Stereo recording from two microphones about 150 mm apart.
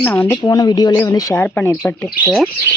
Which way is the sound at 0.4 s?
25° left (ahead or behind).